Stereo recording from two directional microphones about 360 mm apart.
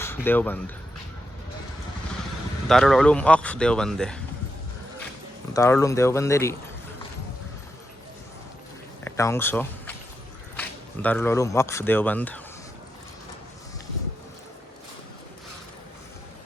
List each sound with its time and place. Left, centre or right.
0.0 s speech: centre
2.6 s speech: centre
5.5 s speech: centre
9.0 s speech: centre